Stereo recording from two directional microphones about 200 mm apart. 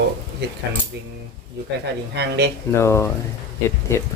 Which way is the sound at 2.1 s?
60° right (ahead or behind).